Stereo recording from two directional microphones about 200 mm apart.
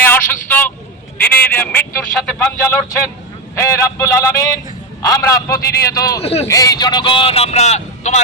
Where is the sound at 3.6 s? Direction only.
15° left (ahead or behind).